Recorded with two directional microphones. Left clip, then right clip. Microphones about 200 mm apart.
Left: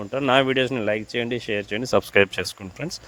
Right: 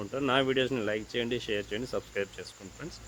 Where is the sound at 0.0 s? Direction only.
45° left (ahead or behind).